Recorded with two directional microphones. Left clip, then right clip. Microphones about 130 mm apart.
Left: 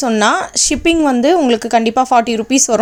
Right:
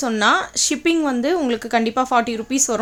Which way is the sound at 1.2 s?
40° left (ahead or behind).